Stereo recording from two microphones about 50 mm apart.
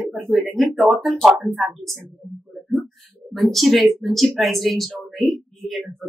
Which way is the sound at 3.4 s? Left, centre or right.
Centre.